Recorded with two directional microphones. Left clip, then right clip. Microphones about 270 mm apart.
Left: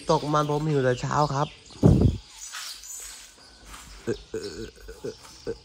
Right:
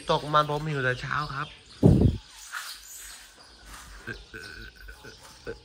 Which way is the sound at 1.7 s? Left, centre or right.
Right.